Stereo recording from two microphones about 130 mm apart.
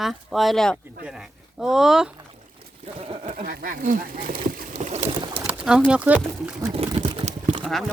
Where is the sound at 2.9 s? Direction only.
45° right (ahead or behind).